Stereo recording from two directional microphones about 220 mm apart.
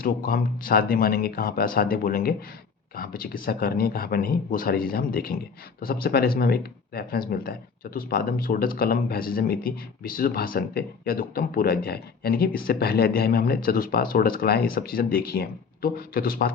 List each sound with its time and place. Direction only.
0.0 s speech: 40° left (ahead or behind)